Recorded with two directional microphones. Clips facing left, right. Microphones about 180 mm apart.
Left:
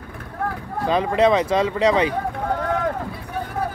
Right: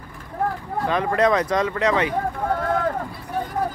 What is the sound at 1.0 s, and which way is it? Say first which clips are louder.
Speech: left 2 dB; 25° left (ahead or behind).